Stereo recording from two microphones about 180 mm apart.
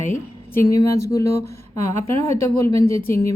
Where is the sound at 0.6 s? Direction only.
15° left (ahead or behind).